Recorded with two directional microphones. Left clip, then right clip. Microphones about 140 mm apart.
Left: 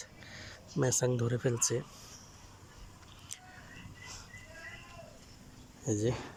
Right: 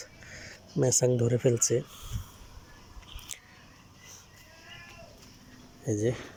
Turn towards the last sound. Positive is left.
turn(degrees=0)  # may be behind; listen again after turning